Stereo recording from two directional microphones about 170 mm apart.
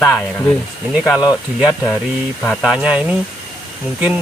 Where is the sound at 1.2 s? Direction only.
5° right (ahead or behind).